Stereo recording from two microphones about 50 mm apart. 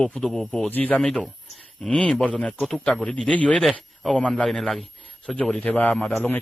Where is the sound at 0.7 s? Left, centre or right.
Left.